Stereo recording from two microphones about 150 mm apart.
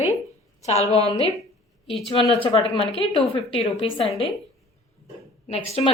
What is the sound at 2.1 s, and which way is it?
A woman's voice, 35° left (ahead or behind).